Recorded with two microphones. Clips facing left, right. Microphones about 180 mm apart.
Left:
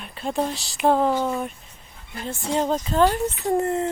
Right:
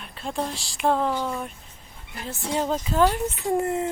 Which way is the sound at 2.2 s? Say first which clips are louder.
Left 3 dB; 5° right (ahead or behind).